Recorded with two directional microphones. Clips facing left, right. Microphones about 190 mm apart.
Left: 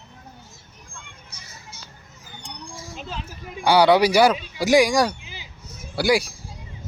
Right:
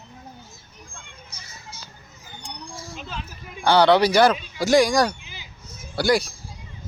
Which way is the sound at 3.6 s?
10° left (ahead or behind).